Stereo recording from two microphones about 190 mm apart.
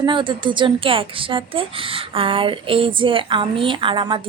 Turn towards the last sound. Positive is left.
turn(degrees=-25)  # may be behind; listen again after turning